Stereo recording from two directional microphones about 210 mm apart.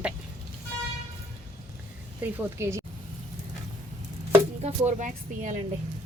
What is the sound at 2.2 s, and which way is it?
Speech, 10° right (ahead or behind).